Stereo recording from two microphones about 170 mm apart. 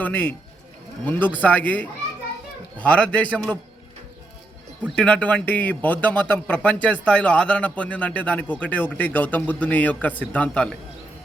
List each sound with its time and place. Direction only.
0.0 s a man's voice: 5° left (ahead or behind)
1.4 s a man's voice: 10° left (ahead or behind)
4.9 s a man's voice: 5° left (ahead or behind)